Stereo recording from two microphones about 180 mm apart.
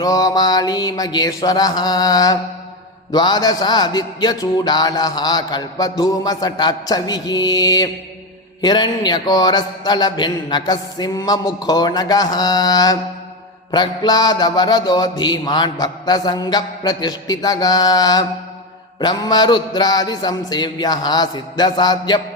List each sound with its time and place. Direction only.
0.0 s music: 20° left (ahead or behind)